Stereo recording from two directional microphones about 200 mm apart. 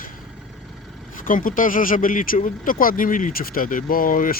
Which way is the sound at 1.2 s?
45° left (ahead or behind).